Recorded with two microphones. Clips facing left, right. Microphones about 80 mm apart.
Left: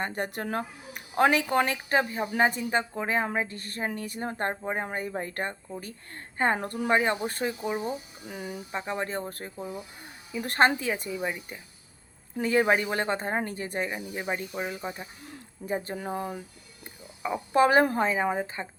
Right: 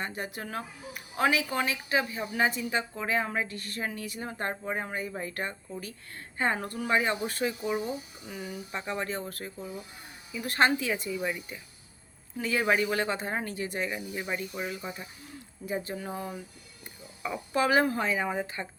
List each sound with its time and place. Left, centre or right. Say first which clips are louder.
0.0 s speech: left 4 dB; left
4.6 s speech: left 2 dB; left
4.9 s speech: left 2 dB; left
8.7 s speech: left 2 dB; left
9.2 s speech: left 2 dB; left
11.2 s speech: left 1 dB; left
12.4 s speech: left 3 dB; left
15.3 s speech: left 2 dB; left